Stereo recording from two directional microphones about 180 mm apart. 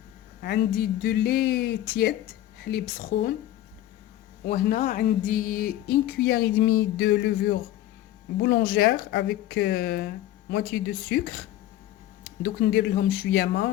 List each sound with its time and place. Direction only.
0.4 s speech: 60° left (ahead or behind)
4.4 s speech: 50° left (ahead or behind)
6.1 s speech: 65° left (ahead or behind)
12.4 s speech: 65° left (ahead or behind)